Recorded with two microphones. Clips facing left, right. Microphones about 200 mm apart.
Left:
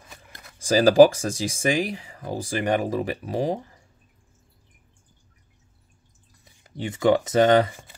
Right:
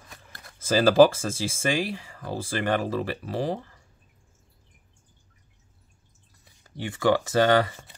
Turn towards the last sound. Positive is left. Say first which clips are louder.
# left 3 dB
turn(degrees=20)  # may be behind; listen again after turning